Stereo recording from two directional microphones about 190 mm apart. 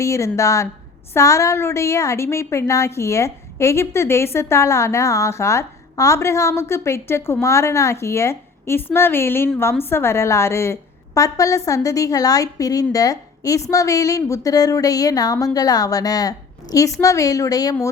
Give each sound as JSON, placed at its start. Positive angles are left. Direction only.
{"t": 0.0, "sound": "a woman's voice", "side_deg": 15}